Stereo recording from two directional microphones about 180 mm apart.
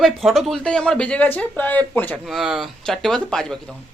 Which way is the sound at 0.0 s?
Centre (ahead or behind).